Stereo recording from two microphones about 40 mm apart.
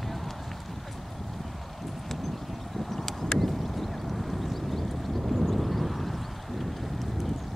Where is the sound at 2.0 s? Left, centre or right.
Centre.